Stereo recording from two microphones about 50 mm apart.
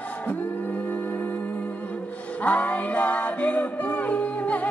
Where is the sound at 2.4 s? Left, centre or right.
Left.